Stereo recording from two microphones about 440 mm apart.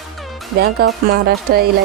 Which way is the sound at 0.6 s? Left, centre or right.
Right.